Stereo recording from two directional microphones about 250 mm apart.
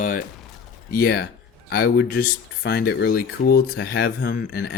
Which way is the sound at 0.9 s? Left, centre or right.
Left.